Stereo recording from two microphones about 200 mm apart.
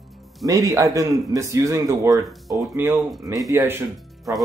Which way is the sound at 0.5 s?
15° right (ahead or behind).